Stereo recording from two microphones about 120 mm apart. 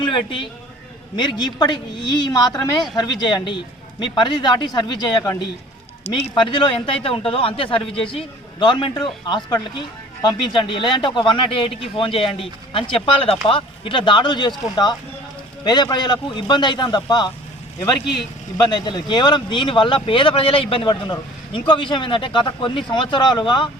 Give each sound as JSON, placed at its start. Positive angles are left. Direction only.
{"t": 0.0, "sound": "a man's voice", "side_deg": 40}
{"t": 6.3, "sound": "speech", "side_deg": 40}
{"t": 18.5, "sound": "speech", "side_deg": 35}